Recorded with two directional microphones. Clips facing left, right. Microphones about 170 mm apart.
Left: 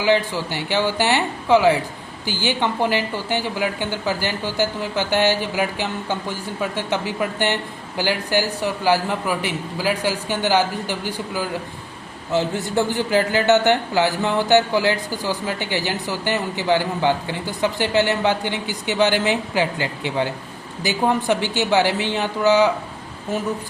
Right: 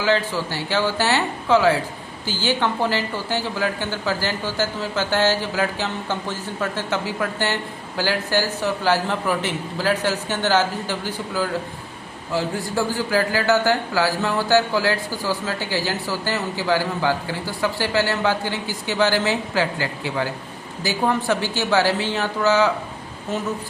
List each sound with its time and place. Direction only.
0.0 s a woman's voice: 15° left (ahead or behind)